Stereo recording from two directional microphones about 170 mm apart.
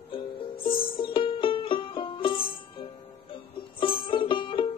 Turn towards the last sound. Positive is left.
turn(degrees=30)  # may be behind; listen again after turning